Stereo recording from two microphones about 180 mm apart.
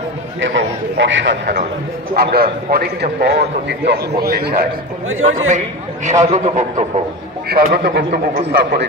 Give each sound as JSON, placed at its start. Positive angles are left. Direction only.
{"t": 0.4, "sound": "a man's voice", "side_deg": -90}
{"t": 2.1, "sound": "a man's voice", "side_deg": -60}
{"t": 6.0, "sound": "a man's voice", "side_deg": -40}
{"t": 7.4, "sound": "a man's voice", "side_deg": -60}